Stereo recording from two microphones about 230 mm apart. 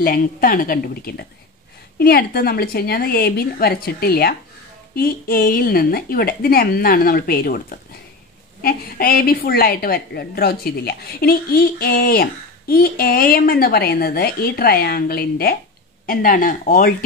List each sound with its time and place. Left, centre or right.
0.0 s a woman's voice: left